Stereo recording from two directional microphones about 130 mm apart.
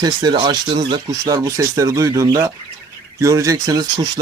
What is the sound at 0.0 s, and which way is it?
Speech, 35° right (ahead or behind).